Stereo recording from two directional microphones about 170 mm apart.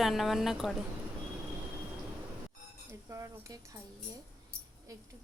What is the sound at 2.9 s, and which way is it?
Speech, 15° right (ahead or behind).